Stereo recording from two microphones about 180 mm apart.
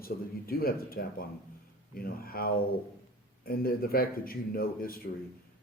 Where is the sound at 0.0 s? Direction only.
55° left (ahead or behind).